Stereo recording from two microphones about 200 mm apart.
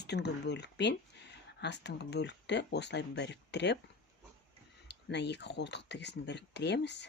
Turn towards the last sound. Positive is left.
turn(degrees=60)  # may be behind; listen again after turning